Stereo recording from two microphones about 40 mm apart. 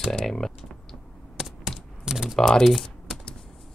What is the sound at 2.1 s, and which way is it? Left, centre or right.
Speech, centre.